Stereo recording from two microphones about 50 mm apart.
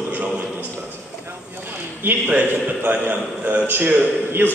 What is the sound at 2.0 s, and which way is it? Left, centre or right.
Speech, right.